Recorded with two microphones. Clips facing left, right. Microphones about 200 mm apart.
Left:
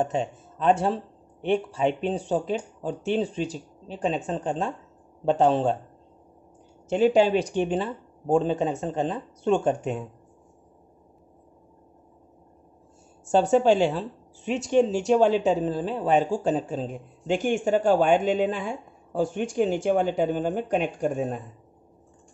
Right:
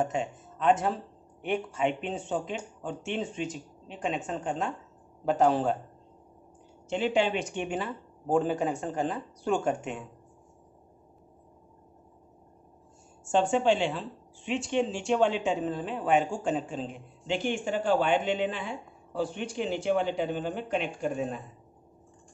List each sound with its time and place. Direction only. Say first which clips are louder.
0.0 s speech: left 3 dB; 35° left (ahead or behind)
6.9 s speech: left 7 dB; 40° left (ahead or behind)
13.2 s a woman's voice: left 5 dB; 40° left (ahead or behind)